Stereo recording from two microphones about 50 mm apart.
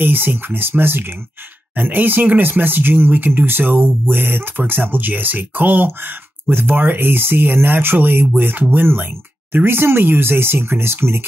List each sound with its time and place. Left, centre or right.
0.0 s speech: right